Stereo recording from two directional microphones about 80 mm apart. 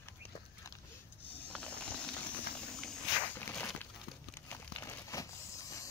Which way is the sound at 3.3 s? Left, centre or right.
Left.